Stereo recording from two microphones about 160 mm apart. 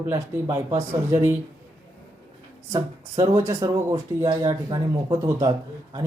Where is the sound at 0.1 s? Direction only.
15° right (ahead or behind).